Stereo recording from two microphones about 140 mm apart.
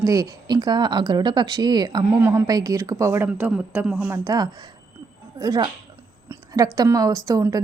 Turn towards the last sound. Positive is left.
turn(degrees=-25)  # may be behind; listen again after turning